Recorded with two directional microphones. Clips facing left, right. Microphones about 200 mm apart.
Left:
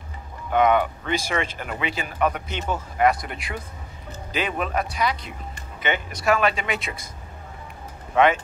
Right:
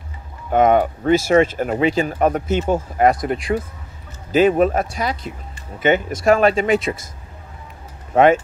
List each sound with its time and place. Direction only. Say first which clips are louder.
0.5 s speech: right 5 dB; 45° right (ahead or behind)
8.1 s speech: right 6 dB; 45° right (ahead or behind)